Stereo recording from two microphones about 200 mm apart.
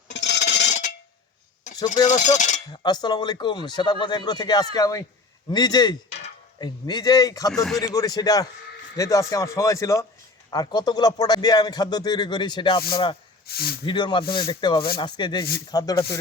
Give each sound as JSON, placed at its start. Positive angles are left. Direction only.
{"t": 0.1, "sound": "a sound", "side_deg": 60}
{"t": 2.0, "sound": "speech", "side_deg": 35}
{"t": 2.6, "sound": "speech", "side_deg": 20}
{"t": 6.6, "sound": "speech", "side_deg": 20}
{"t": 7.5, "sound": "speech", "side_deg": 0}
{"t": 7.8, "sound": "speech", "side_deg": 20}
{"t": 13.5, "sound": "speech", "side_deg": 50}
{"t": 13.8, "sound": "speech", "side_deg": 25}